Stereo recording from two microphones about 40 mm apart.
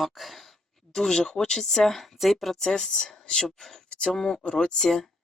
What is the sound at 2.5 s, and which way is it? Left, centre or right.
Speech, centre.